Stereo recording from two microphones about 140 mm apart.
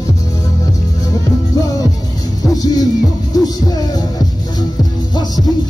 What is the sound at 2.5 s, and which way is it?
Music, 25° left (ahead or behind).